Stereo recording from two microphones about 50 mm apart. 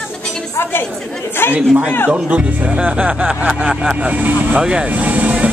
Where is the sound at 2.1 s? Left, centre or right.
Right.